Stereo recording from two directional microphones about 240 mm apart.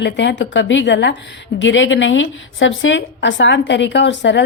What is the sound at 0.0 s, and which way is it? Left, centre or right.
A woman's voice, left.